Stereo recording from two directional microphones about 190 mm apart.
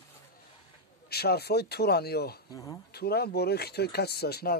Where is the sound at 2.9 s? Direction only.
55° left (ahead or behind).